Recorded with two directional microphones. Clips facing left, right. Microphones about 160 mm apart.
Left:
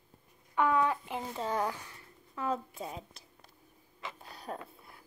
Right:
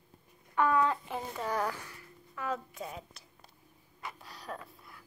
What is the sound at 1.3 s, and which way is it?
A woman's voice, 25° left (ahead or behind).